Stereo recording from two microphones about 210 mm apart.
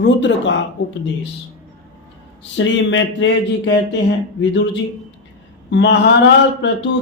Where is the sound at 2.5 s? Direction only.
60° left (ahead or behind).